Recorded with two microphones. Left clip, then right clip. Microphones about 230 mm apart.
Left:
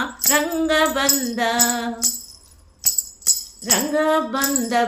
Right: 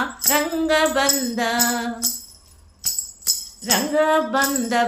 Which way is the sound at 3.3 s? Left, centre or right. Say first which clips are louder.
Left 2 dB; left.